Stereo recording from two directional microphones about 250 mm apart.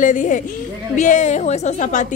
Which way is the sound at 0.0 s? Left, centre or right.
Left.